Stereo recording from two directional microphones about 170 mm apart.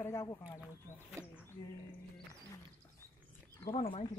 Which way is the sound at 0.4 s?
10° right (ahead or behind).